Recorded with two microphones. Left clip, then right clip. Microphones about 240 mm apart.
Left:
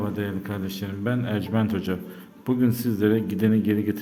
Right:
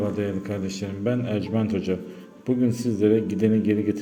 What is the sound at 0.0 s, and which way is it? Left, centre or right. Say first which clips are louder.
Speech: right 3 dB; centre.